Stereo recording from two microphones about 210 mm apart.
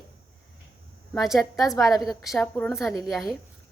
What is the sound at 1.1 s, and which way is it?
A woman's voice, centre (ahead or behind).